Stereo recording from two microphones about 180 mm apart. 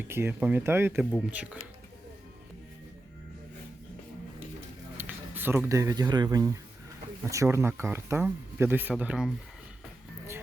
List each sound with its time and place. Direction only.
0.0 s speech: 10° right (ahead or behind)
4.9 s speech: 10° right (ahead or behind)